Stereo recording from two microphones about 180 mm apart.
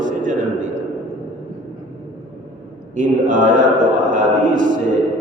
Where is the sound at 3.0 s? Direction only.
45° right (ahead or behind).